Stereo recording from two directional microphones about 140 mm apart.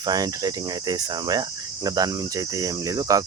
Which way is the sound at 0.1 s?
30° right (ahead or behind).